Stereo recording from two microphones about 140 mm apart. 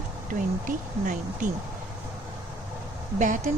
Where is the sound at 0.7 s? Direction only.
70° right (ahead or behind).